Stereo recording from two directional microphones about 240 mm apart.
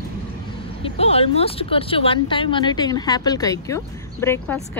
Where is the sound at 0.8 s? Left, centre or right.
Left.